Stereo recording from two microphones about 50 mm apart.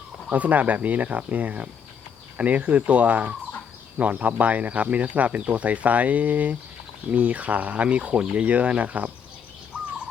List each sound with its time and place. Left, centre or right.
0.3 s speech: right